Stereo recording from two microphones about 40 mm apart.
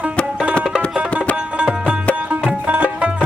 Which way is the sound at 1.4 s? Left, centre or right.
Right.